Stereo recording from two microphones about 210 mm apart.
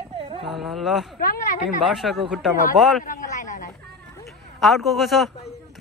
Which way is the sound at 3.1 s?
35° left (ahead or behind).